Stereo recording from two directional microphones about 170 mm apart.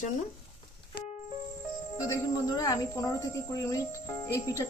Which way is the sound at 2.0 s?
20° left (ahead or behind).